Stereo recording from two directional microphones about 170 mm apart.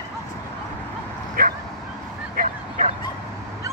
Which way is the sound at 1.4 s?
60° right (ahead or behind).